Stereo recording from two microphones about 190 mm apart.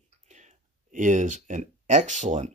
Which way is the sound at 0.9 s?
40° right (ahead or behind).